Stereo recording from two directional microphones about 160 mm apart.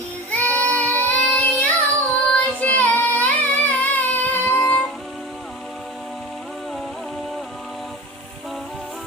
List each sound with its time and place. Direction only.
0.3 s child singing: 10° left (ahead or behind)